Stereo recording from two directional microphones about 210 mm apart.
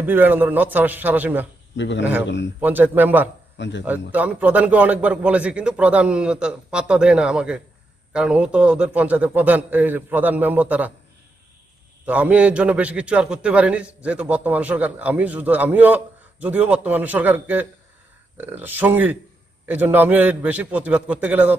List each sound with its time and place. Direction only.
0.0 s a man's voice: 10° right (ahead or behind)
1.8 s a man's voice: 60° left (ahead or behind)
2.6 s a man's voice: 10° right (ahead or behind)
3.5 s a man's voice: 60° left (ahead or behind)
4.1 s a man's voice: 5° right (ahead or behind)
12.1 s a man's voice: 5° right (ahead or behind)